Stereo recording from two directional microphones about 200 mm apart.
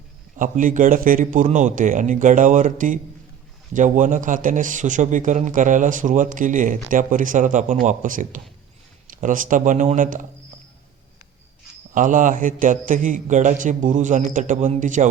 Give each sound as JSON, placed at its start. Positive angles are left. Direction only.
{"t": 0.3, "sound": "a man's voice", "side_deg": -40}
{"t": 11.9, "sound": "a man's voice", "side_deg": -40}